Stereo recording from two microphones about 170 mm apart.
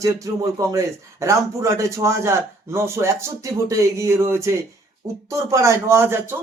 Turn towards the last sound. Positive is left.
turn(degrees=-15)  # may be behind; listen again after turning